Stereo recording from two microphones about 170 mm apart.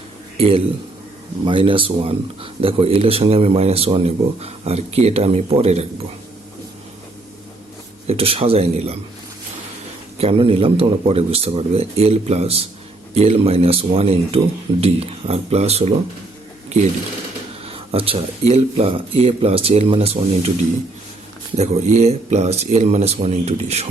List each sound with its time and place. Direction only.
0.3 s speech: 35° right (ahead or behind)
8.0 s speech: 35° right (ahead or behind)
10.2 s speech: 35° right (ahead or behind)
17.7 s speech: 35° right (ahead or behind)
21.5 s speech: 40° right (ahead or behind)